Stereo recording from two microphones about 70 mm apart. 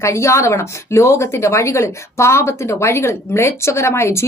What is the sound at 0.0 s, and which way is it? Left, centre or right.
Speech, left.